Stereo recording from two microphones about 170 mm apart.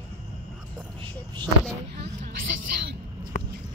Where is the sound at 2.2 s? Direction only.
60° right (ahead or behind).